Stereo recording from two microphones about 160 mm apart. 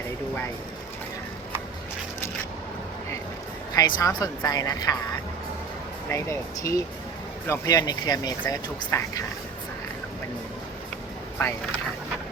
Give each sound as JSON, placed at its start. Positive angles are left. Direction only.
{"t": 3.8, "sound": "speech", "side_deg": 25}
{"t": 6.1, "sound": "speech", "side_deg": 20}
{"t": 11.3, "sound": "speech", "side_deg": 15}